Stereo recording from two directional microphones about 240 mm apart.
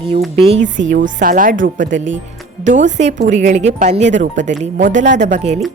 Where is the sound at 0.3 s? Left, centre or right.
Right.